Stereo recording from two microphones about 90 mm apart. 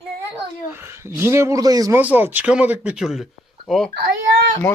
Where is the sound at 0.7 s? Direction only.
30° right (ahead or behind).